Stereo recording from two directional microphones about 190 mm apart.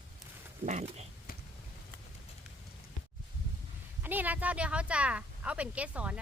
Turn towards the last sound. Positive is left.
turn(degrees=-5)  # may be behind; listen again after turning